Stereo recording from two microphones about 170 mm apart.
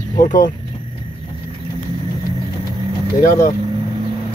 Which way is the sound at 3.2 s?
60° left (ahead or behind).